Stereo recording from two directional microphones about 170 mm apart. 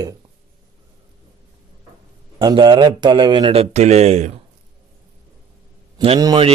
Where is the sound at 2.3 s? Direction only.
30° right (ahead or behind).